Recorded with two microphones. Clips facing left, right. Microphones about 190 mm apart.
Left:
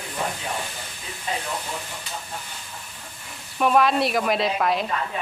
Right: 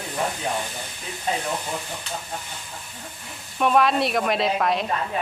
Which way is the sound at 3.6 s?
Centre (ahead or behind).